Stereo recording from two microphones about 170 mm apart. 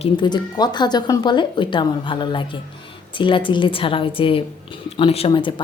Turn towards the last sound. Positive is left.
turn(degrees=30)  # may be behind; listen again after turning